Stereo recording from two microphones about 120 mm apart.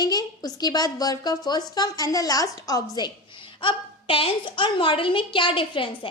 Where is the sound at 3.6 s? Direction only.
45° left (ahead or behind).